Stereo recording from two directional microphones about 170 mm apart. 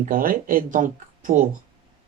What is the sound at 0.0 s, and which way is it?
Speech, 55° right (ahead or behind).